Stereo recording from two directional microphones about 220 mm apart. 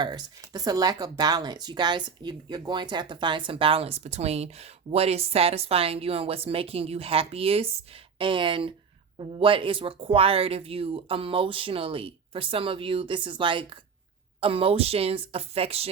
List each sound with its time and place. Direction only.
0.0 s speech: 20° right (ahead or behind)